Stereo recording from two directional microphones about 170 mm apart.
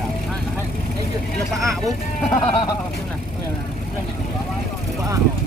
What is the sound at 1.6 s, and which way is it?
Speech, 20° right (ahead or behind).